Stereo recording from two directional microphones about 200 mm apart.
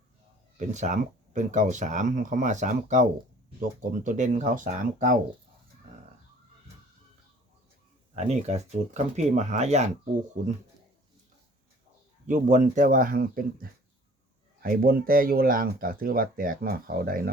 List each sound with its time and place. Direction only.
0.5 s speech: 35° right (ahead or behind)
8.1 s speech: 35° right (ahead or behind)
12.2 s speech: 40° right (ahead or behind)